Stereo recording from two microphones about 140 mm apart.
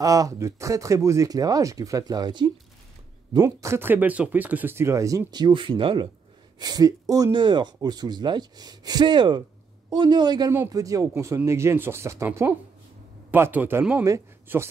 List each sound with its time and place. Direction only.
0.0 s speech: 25° right (ahead or behind)
3.3 s a man's voice: 20° right (ahead or behind)